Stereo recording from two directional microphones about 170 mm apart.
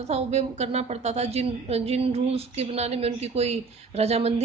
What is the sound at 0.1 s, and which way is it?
A woman's voice, 40° right (ahead or behind).